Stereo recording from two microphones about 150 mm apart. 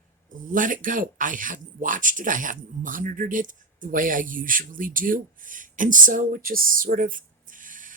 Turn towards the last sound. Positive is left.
turn(degrees=-60)  # may be behind; listen again after turning